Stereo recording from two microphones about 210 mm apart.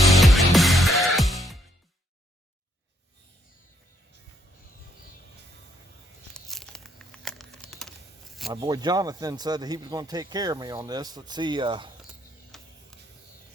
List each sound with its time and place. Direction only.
0.1 s music: centre (ahead or behind)
6.3 s crumpling: 5° left (ahead or behind)
8.6 s speech: 20° right (ahead or behind)
12.5 s printer: centre (ahead or behind)